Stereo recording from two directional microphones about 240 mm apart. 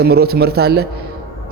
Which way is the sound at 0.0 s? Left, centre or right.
Right.